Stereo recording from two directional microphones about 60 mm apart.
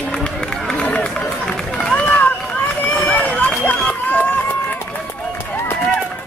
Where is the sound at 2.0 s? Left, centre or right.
Left.